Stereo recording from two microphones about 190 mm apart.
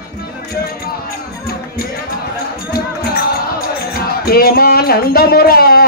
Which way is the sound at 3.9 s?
50° left (ahead or behind).